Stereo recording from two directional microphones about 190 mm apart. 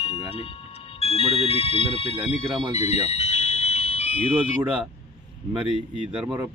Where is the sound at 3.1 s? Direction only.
35° left (ahead or behind).